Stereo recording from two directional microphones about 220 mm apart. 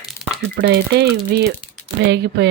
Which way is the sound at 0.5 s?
50° right (ahead or behind).